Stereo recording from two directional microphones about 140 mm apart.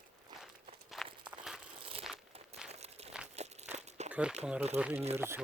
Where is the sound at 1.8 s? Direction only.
40° right (ahead or behind).